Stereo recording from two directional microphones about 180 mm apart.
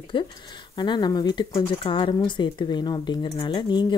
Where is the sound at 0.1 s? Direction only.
25° left (ahead or behind).